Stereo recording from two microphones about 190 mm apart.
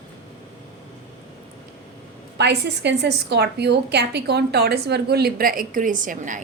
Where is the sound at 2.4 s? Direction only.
60° right (ahead or behind).